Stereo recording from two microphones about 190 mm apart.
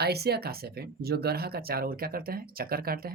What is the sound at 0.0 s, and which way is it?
Speech, 55° right (ahead or behind).